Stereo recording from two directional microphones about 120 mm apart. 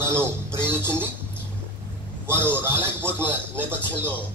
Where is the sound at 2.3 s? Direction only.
20° right (ahead or behind).